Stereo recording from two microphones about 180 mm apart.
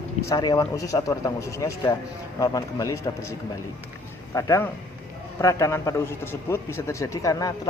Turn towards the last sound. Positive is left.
turn(degrees=20)  # may be behind; listen again after turning